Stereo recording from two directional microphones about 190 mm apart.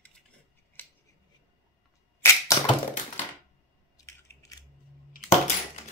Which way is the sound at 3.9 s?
15° left (ahead or behind).